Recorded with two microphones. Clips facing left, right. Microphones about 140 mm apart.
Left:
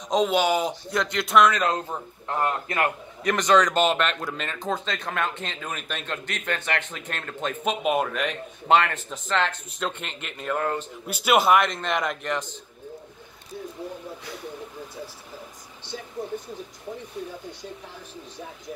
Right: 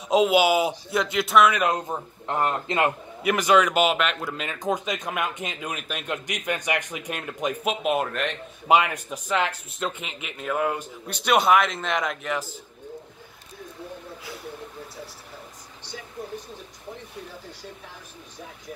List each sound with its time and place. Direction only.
0.1 s a man's voice: 5° right (ahead or behind)
1.5 s speech: 15° right (ahead or behind)
3.3 s speech: 10° right (ahead or behind)
7.8 s a man's voice: centre (ahead or behind)
8.7 s speech: 10° right (ahead or behind)
11.1 s a man's voice: 5° left (ahead or behind)